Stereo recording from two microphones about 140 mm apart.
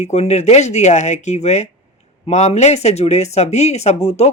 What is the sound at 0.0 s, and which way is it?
Speech, 50° left (ahead or behind).